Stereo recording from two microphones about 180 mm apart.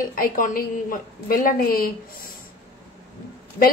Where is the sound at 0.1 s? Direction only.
50° left (ahead or behind).